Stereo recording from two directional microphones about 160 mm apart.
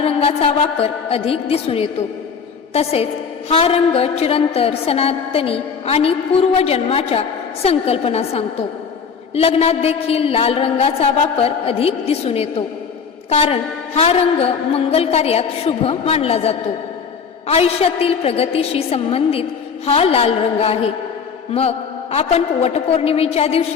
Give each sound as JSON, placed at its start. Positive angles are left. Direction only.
{"t": 0.0, "sound": "a woman's voice", "side_deg": 35}